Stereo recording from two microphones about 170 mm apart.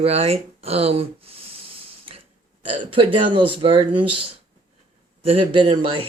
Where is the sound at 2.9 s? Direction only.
30° right (ahead or behind).